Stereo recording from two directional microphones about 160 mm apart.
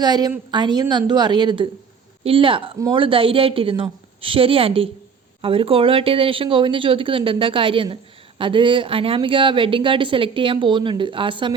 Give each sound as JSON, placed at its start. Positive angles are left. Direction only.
{"t": 0.0, "sound": "a woman's voice", "side_deg": -25}